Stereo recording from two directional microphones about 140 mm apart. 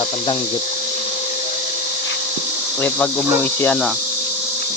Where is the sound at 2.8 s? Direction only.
10° left (ahead or behind).